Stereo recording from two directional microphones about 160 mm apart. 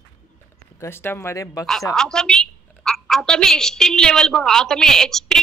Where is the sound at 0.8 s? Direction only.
15° left (ahead or behind).